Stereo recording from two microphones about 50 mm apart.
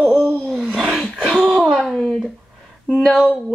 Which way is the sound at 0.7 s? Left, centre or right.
Centre.